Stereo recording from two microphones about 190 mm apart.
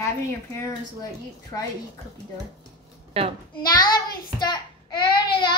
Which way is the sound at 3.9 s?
20° left (ahead or behind).